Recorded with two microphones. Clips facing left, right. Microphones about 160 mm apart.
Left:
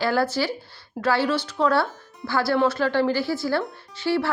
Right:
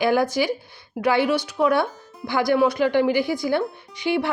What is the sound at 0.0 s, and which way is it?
Speech, 15° right (ahead or behind).